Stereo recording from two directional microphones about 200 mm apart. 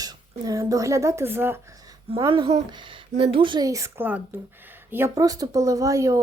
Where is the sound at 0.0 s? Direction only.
20° right (ahead or behind).